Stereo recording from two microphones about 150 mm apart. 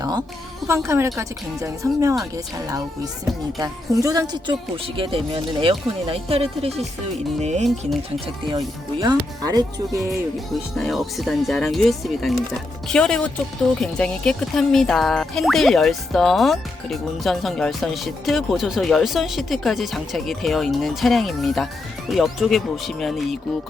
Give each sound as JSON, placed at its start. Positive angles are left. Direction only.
{"t": 0.0, "sound": "speech", "side_deg": -25}
{"t": 4.9, "sound": "speech", "side_deg": -35}
{"t": 8.4, "sound": "speech", "side_deg": -30}
{"t": 10.8, "sound": "speech", "side_deg": 0}